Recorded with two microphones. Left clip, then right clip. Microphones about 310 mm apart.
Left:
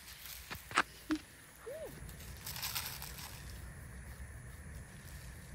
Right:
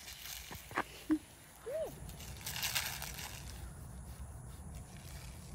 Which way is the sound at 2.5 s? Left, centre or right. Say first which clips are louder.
Right 4 dB; centre.